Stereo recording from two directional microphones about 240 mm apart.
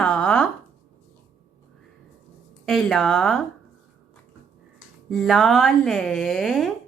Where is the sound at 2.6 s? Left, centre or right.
Centre.